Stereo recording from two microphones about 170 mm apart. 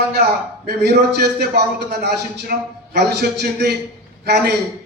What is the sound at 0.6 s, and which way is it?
A man's voice, 70° right (ahead or behind).